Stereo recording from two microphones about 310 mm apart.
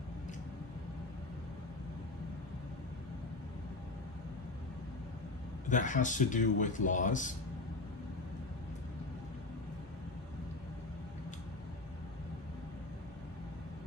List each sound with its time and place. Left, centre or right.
5.6 s a man's voice: left